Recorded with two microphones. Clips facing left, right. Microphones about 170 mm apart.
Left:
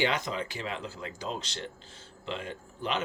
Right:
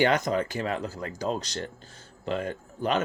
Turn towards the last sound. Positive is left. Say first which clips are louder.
# right 6 dB
turn(degrees=-45)  # may be behind; listen again after turning